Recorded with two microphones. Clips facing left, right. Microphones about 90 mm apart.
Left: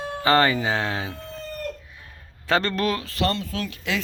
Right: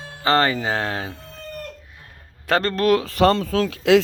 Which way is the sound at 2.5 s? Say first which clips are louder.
Right 3 dB; 40° right (ahead or behind).